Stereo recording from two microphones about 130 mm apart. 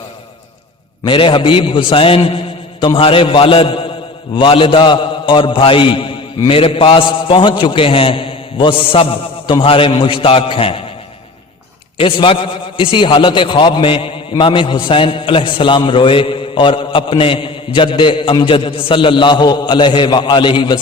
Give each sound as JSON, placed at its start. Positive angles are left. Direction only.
{"t": 1.0, "sound": "a man's voice", "side_deg": 40}
{"t": 11.9, "sound": "a man's voice", "side_deg": 40}